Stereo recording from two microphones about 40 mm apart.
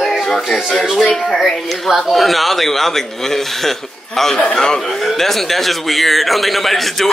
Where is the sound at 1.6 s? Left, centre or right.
Centre.